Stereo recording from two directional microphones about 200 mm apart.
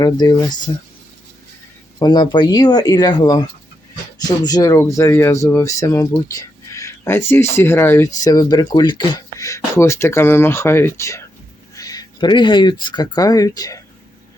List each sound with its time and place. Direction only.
0.0 s speech: 20° left (ahead or behind)
2.0 s speech: 20° left (ahead or behind)